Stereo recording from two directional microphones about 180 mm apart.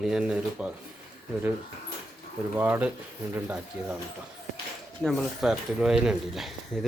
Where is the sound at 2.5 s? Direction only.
10° right (ahead or behind).